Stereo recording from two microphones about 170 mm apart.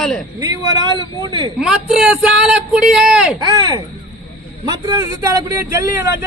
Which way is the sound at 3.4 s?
25° right (ahead or behind).